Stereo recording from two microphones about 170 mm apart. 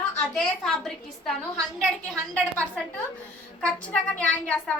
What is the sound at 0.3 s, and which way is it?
A woman's voice, centre (ahead or behind).